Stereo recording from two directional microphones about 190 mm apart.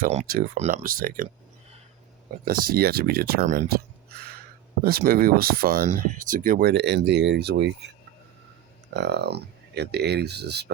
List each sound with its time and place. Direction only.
0.5 s speech: 40° right (ahead or behind)
2.4 s speech: 50° right (ahead or behind)
4.1 s a sound: 55° right (ahead or behind)
4.8 s speech: 50° right (ahead or behind)
8.9 s speech: 60° right (ahead or behind)